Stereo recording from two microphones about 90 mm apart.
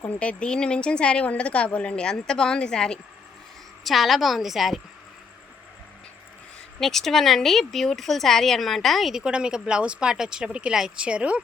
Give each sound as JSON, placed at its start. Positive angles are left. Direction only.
{"t": 0.2, "sound": "a woman's voice", "side_deg": 10}
{"t": 6.7, "sound": "speech", "side_deg": 5}